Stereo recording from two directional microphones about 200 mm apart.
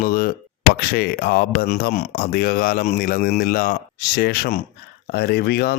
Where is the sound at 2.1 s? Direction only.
50° left (ahead or behind).